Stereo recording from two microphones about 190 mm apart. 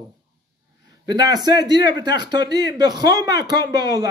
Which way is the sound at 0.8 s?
20° right (ahead or behind).